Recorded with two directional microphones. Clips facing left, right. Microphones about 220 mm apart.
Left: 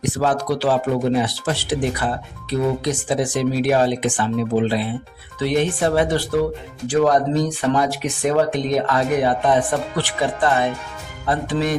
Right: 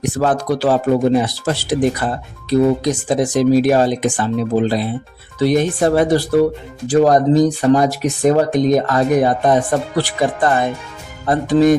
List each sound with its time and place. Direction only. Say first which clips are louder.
0.0 s speech: right 3 dB; 50° right (ahead or behind)
5.4 s speech: right 4 dB; 40° right (ahead or behind)